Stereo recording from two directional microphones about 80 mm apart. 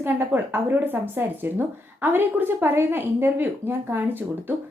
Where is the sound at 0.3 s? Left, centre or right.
Right.